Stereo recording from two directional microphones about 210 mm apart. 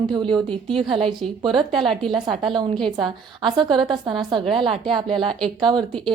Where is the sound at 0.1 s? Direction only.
20° right (ahead or behind).